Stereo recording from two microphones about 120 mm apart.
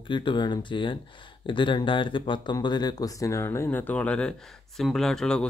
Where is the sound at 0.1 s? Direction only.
40° left (ahead or behind).